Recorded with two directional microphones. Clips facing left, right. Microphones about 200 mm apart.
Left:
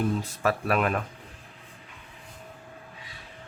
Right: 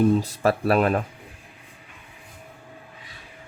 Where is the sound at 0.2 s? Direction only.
35° right (ahead or behind).